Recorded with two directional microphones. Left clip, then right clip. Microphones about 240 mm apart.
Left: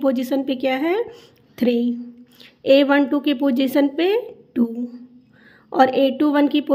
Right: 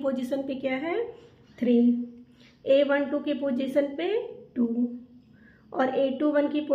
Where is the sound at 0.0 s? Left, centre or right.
Left.